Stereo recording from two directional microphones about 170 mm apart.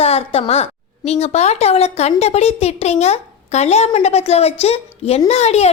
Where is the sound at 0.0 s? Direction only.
35° left (ahead or behind).